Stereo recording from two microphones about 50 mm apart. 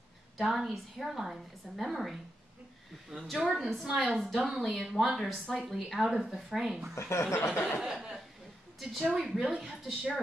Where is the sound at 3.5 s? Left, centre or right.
Centre.